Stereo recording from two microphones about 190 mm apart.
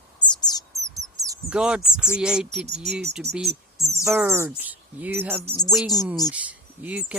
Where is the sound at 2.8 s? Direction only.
60° right (ahead or behind).